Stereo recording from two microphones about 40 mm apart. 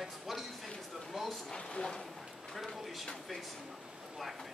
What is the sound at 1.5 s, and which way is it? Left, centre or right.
Speech, centre.